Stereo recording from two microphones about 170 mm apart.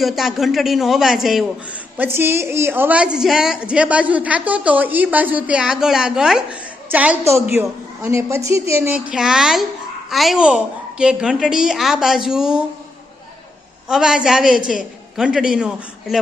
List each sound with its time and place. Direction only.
0.0 s a woman's voice: centre (ahead or behind)
2.0 s a woman's voice: 10° right (ahead or behind)
13.8 s a woman's voice: 5° right (ahead or behind)